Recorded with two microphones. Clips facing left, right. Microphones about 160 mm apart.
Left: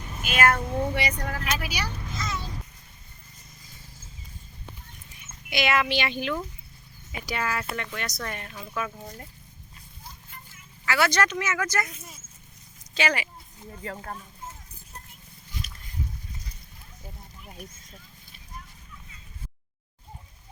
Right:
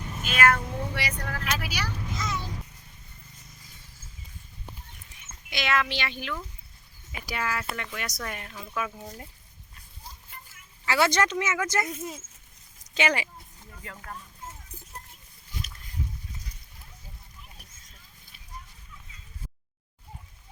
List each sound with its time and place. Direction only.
0.3 s speech: 25° left (ahead or behind)
2.1 s a child's voice: 15° right (ahead or behind)
5.5 s speech: 10° left (ahead or behind)
7.3 s speech: 5° right (ahead or behind)
10.8 s speech: 25° right (ahead or behind)
12.9 s speech: 20° right (ahead or behind)
13.7 s speech: 35° left (ahead or behind)